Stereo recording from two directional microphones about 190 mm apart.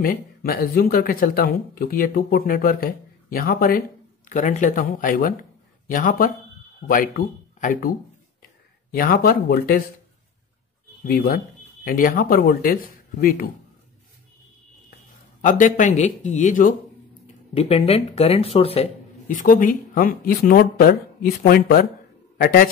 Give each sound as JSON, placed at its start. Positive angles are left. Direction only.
{"t": 0.0, "sound": "speech", "side_deg": 50}
{"t": 8.9, "sound": "speech", "side_deg": 50}
{"t": 11.1, "sound": "speech", "side_deg": 50}
{"t": 15.4, "sound": "speech", "side_deg": 45}
{"t": 19.2, "sound": "speech", "side_deg": 45}